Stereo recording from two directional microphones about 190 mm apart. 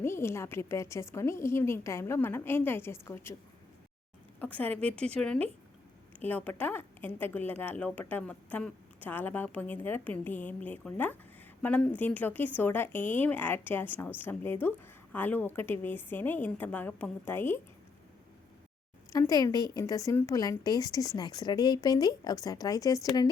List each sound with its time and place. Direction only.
0.0 s a woman's voice: 15° left (ahead or behind)
4.4 s a woman's voice: 10° left (ahead or behind)
19.1 s a woman's voice: 20° left (ahead or behind)